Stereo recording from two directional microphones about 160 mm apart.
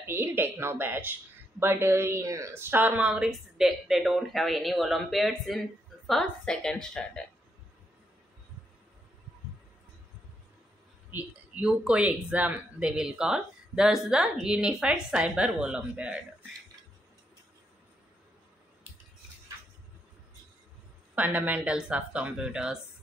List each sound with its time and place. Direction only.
0.0 s speech: 15° right (ahead or behind); by 7.2 s 5° left (ahead or behind)
11.1 s speech: 10° right (ahead or behind)
21.1 s speech: 10° right (ahead or behind)